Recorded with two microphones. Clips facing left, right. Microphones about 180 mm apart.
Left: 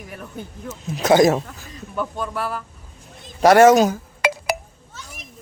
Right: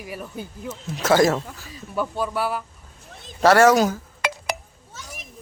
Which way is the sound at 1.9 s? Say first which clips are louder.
Right 1 dB; 5° right (ahead or behind).